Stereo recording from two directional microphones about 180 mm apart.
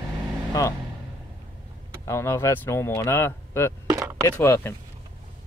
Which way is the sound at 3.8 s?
20° right (ahead or behind).